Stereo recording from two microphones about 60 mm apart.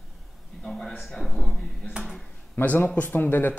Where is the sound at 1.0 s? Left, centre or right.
Centre.